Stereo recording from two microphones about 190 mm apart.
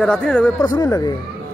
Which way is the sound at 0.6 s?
20° left (ahead or behind).